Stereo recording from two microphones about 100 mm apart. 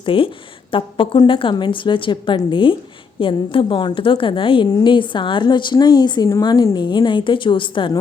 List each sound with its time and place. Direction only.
0.0 s a woman's voice: 60° left (ahead or behind)